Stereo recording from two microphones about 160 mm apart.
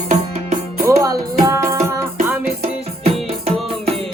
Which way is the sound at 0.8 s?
20° right (ahead or behind).